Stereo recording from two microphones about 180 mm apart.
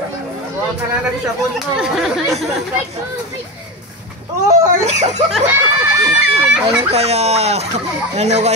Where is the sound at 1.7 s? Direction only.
5° right (ahead or behind).